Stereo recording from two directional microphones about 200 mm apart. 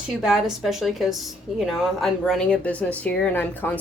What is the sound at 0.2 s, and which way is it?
A woman's voice, centre (ahead or behind).